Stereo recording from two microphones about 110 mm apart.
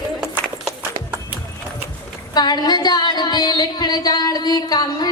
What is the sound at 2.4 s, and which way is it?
Music, 40° left (ahead or behind).